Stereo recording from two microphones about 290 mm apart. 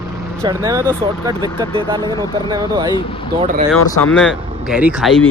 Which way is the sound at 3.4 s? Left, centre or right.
Right.